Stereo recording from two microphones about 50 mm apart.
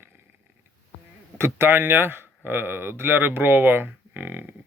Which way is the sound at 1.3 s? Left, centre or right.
Right.